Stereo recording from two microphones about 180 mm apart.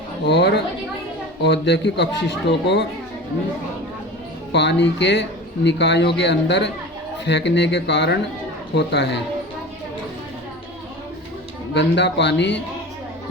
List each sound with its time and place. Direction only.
0.3 s speech: 70° left (ahead or behind)
4.5 s speech: 70° left (ahead or behind)
11.7 s speech: 75° left (ahead or behind)